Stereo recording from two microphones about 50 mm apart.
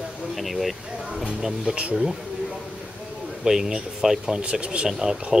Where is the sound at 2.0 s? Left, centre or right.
Centre.